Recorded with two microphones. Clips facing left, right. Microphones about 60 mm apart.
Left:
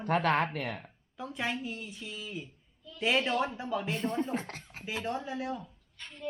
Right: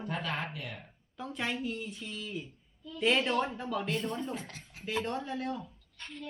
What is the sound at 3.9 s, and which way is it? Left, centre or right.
Speech, left.